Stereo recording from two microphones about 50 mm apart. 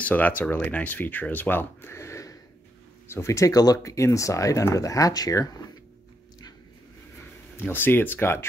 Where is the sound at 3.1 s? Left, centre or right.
Left.